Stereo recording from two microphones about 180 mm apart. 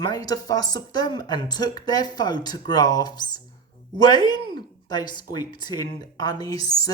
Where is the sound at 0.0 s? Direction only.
20° left (ahead or behind).